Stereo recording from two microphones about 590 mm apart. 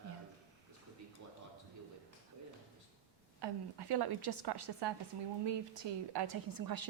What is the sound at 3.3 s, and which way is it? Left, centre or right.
A woman's voice, right.